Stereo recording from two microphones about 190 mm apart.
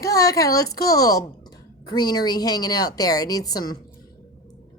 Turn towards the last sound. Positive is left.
turn(degrees=20)  # may be behind; listen again after turning